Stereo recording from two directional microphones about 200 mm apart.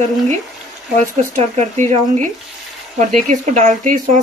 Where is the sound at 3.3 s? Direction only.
40° right (ahead or behind).